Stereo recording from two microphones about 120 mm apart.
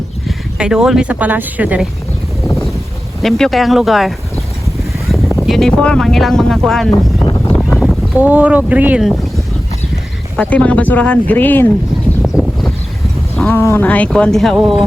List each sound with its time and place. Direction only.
0.3 s speech: 5° right (ahead or behind)
3.2 s speech: 5° left (ahead or behind)
5.5 s speech: 5° left (ahead or behind)
7.8 s speech: 10° right (ahead or behind)
10.3 s speech: 10° left (ahead or behind)
12.2 s a sound: 5° right (ahead or behind)
13.3 s a sound: 10° left (ahead or behind)
13.6 s speech: 20° left (ahead or behind); by 14.8 s centre (ahead or behind)